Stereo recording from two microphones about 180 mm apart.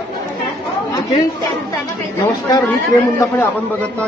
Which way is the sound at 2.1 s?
15° left (ahead or behind).